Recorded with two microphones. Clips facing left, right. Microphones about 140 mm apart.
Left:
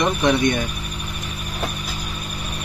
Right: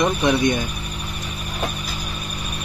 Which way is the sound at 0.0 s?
5° right (ahead or behind).